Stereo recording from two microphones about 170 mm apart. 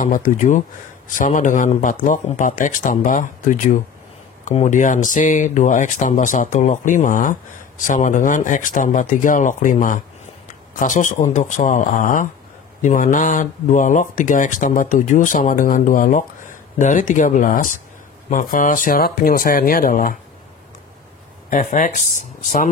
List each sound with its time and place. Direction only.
0.0 s speech: 50° left (ahead or behind)
21.5 s speech: 50° left (ahead or behind)